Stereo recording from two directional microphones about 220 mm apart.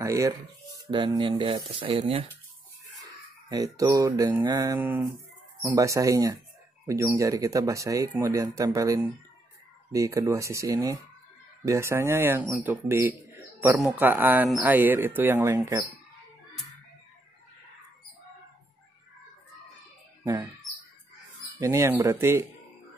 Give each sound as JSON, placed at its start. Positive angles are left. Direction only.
{"t": 0.0, "sound": "speech", "side_deg": -15}
{"t": 21.5, "sound": "speech", "side_deg": -15}